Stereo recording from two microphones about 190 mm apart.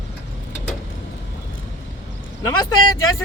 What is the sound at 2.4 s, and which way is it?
Speech, 20° left (ahead or behind).